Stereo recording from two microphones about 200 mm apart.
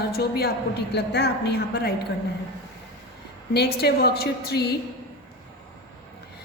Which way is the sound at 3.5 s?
55° left (ahead or behind).